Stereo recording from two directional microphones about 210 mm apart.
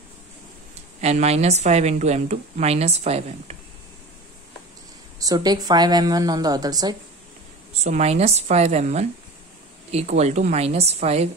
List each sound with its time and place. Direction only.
1.0 s a woman's voice: 30° right (ahead or behind)
5.2 s a woman's voice: 20° right (ahead or behind)
7.8 s a woman's voice: 30° right (ahead or behind)